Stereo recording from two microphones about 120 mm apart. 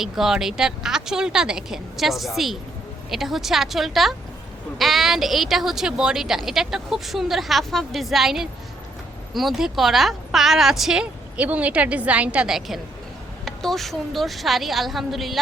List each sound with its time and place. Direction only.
0.0 s speech: 5° right (ahead or behind)